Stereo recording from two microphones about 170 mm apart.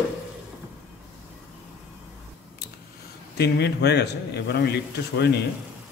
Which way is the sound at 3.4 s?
75° left (ahead or behind).